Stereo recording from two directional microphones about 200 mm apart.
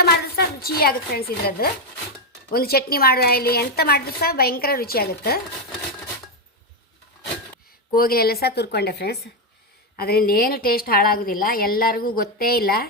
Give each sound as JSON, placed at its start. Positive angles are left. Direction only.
{"t": 0.0, "sound": "a woman's voice", "side_deg": 50}
{"t": 7.9, "sound": "a woman's voice", "side_deg": 50}